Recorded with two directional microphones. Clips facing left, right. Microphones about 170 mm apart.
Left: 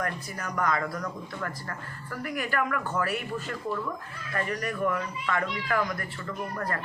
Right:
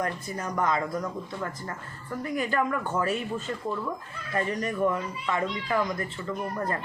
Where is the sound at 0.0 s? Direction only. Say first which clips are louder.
Right 2 dB; 25° right (ahead or behind).